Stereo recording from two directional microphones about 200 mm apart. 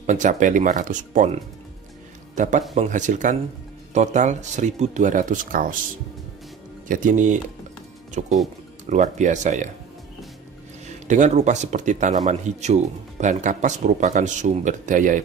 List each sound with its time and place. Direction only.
0.0 s speech: 40° right (ahead or behind)
2.3 s a man's voice: 40° right (ahead or behind)
6.9 s speech: 40° right (ahead or behind)
11.1 s speech: 35° right (ahead or behind)